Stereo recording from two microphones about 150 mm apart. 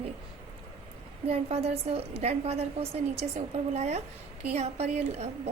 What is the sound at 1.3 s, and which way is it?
A woman's voice, 45° right (ahead or behind).